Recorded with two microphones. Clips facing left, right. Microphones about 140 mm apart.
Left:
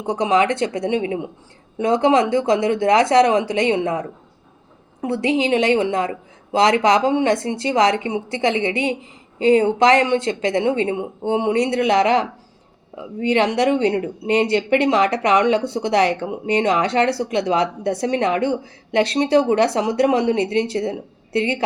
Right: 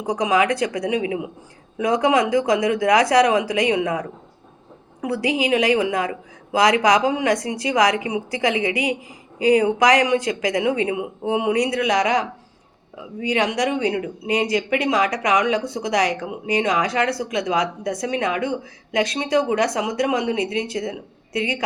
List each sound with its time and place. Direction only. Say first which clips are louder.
0.0 s a woman's voice: left 2 dB; 30° left (ahead or behind)